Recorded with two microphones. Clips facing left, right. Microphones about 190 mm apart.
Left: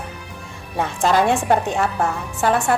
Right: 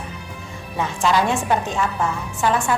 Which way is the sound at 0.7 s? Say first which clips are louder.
Left 2 dB; 50° left (ahead or behind).